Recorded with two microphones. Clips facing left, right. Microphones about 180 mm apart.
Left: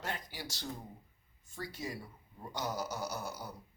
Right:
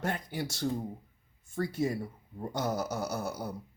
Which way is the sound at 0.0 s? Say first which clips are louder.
Right 8 dB; 55° right (ahead or behind).